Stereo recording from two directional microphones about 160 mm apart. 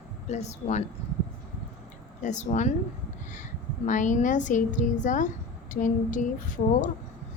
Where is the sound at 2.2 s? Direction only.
50° left (ahead or behind).